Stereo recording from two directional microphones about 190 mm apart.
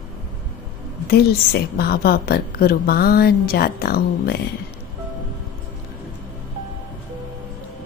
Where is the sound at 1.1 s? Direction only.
55° left (ahead or behind).